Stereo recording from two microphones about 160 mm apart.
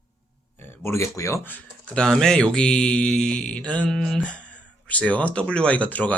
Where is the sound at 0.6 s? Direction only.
15° left (ahead or behind).